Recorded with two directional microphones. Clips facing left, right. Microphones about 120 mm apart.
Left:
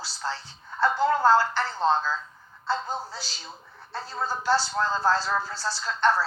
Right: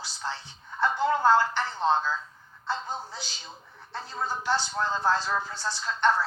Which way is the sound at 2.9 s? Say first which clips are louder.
Left 3 dB; 20° right (ahead or behind).